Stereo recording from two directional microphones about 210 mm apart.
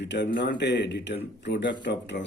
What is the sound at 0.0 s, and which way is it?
A man's voice, 55° left (ahead or behind).